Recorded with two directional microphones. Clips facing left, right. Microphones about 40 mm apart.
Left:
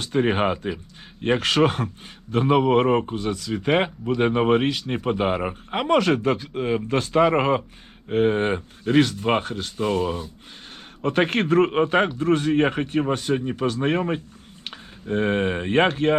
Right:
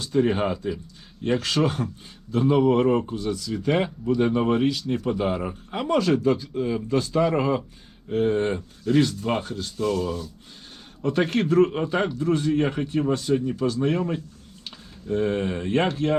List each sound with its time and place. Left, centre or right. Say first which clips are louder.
0.0 s a man's voice: left 1 dB; left
9.7 s a man's voice: left 2 dB; left
11.0 s a man's voice: left 2 dB; left